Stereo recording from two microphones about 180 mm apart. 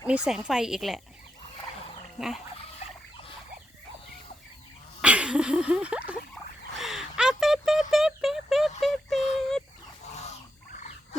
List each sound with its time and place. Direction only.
0.1 s speech: 5° right (ahead or behind)
2.1 s speech: centre (ahead or behind)
4.9 s a sound: 5° right (ahead or behind)
10.8 s wild animals: 40° left (ahead or behind)